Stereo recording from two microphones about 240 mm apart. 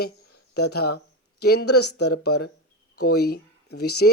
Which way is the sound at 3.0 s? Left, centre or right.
Left.